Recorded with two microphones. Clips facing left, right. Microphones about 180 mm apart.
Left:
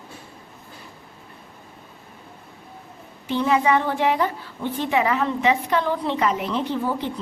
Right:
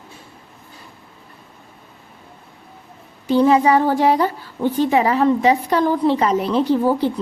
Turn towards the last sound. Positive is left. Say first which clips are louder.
# right 8 dB
turn(degrees=-35)  # may be behind; listen again after turning